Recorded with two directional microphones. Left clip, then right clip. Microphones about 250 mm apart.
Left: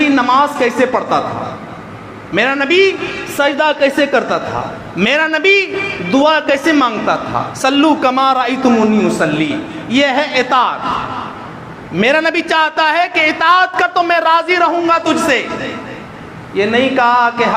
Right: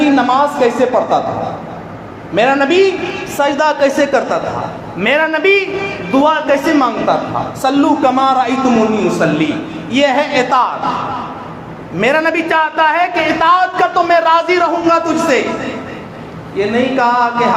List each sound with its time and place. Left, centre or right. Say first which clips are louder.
0.0 s a sound: even; left
2.3 s a man's voice: right 1 dB; left
11.9 s a man's voice: even; left
16.6 s a man's voice: left 1 dB; left